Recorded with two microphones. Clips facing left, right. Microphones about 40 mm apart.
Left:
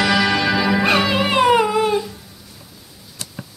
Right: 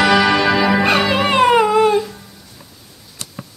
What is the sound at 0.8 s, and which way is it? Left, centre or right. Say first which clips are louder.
Music: right 2 dB; centre.